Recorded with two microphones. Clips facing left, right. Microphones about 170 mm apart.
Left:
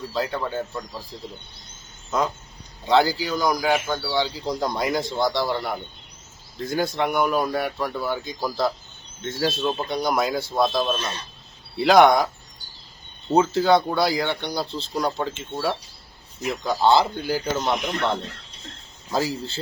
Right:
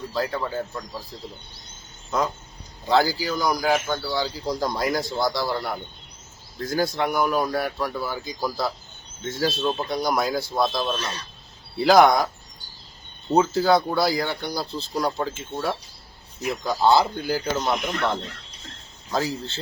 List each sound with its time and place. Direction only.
0.1 s a man's voice: centre (ahead or behind)
2.0 s a man's voice: centre (ahead or behind)
10.9 s a man's voice: 25° left (ahead or behind)
11.8 s a man's voice: centre (ahead or behind)
19.1 s a man's voice: 5° left (ahead or behind)